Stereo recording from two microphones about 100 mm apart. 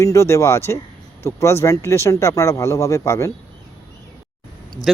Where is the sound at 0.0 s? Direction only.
30° left (ahead or behind).